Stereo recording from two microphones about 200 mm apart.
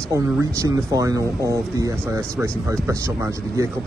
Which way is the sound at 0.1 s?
15° right (ahead or behind).